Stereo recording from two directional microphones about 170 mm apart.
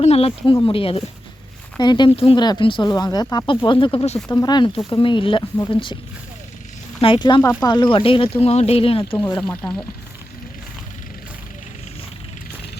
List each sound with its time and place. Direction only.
0.0 s speech: 35° left (ahead or behind)
4.3 s speech: 20° left (ahead or behind)
7.0 s speech: 30° left (ahead or behind)
9.4 s speech: 5° left (ahead or behind)